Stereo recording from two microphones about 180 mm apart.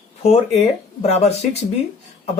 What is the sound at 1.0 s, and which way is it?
Speech, 35° left (ahead or behind).